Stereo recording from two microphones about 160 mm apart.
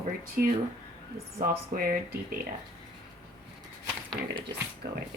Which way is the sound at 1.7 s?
60° right (ahead or behind).